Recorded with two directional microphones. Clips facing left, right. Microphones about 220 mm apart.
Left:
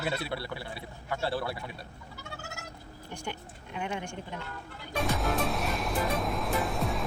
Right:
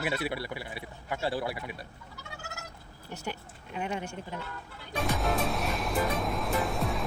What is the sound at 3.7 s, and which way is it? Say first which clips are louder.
Speech: right 1 dB; 40° right (ahead or behind).